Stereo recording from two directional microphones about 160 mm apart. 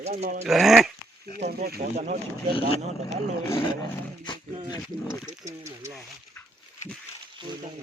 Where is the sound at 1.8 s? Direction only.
40° right (ahead or behind).